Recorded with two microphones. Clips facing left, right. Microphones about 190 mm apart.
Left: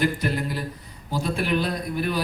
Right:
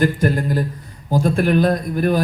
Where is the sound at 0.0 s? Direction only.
45° right (ahead or behind).